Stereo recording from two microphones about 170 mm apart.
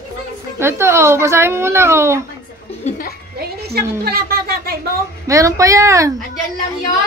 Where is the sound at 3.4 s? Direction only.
65° right (ahead or behind).